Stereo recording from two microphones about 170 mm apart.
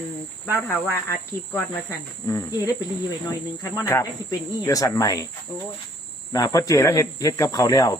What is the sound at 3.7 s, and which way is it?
Speech, 15° left (ahead or behind).